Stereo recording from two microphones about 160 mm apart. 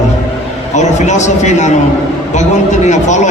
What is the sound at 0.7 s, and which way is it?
A man's voice, 45° left (ahead or behind).